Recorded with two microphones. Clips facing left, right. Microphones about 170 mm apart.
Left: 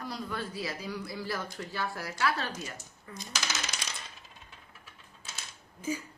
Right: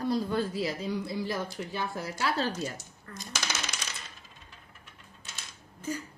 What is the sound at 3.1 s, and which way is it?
Speech, 10° left (ahead or behind).